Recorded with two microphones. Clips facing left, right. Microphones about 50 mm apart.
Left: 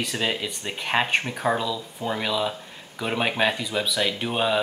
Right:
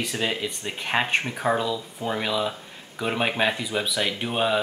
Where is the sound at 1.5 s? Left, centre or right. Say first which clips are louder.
Right 1 dB; centre.